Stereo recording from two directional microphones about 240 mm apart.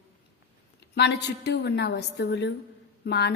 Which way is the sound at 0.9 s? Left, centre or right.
Left.